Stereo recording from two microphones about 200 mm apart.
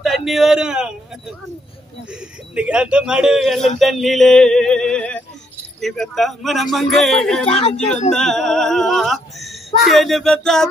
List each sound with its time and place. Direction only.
0.0 s a man's voice: centre (ahead or behind)
2.5 s speech: 5° right (ahead or behind)
7.4 s speech: 30° left (ahead or behind)
8.1 s speech: centre (ahead or behind)